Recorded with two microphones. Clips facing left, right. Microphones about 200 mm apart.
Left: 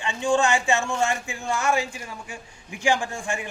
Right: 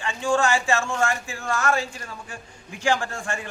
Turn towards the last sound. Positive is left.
turn(degrees=15)  # may be behind; listen again after turning